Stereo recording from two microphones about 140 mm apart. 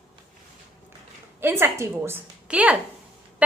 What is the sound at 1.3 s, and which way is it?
A woman's voice, 15° right (ahead or behind).